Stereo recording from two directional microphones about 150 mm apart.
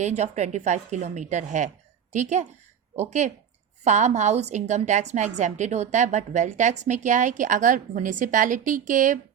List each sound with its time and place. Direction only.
0.0 s a woman's voice: 50° right (ahead or behind)